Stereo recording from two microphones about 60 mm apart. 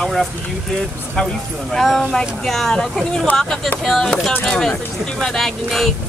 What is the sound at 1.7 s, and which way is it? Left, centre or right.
Speech, centre.